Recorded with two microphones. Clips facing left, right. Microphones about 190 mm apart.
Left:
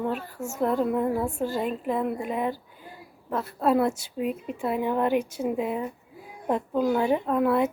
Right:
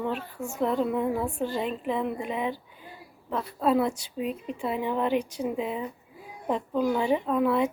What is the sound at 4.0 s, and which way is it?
Speech, 55° left (ahead or behind).